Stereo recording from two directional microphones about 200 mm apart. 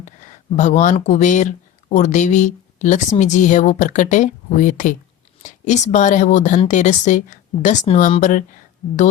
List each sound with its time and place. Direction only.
0.0 s a woman's voice: 35° left (ahead or behind)